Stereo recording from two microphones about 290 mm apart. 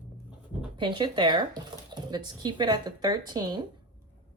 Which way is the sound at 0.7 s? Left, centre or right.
Centre.